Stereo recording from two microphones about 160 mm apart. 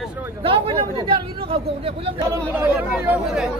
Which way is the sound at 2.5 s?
10° right (ahead or behind).